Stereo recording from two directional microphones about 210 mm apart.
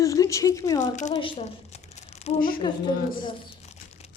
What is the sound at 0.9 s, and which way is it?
A woman's voice, 35° left (ahead or behind).